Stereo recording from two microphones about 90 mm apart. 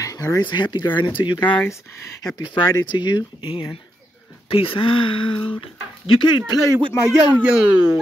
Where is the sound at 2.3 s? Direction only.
55° left (ahead or behind).